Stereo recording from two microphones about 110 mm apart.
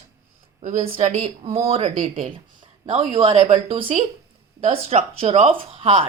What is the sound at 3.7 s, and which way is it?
Speech, 60° right (ahead or behind).